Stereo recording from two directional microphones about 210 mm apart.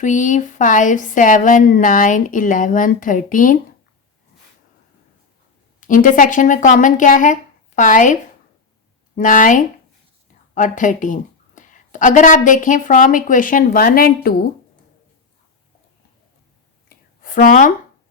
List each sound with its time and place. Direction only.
0.0 s a woman's voice: 35° left (ahead or behind)
5.8 s a woman's voice: 40° left (ahead or behind)
16.9 s a sound: 40° left (ahead or behind)